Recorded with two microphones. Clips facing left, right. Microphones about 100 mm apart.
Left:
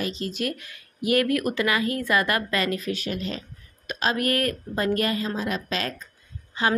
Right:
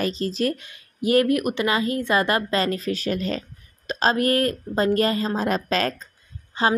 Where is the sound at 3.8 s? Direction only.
30° right (ahead or behind).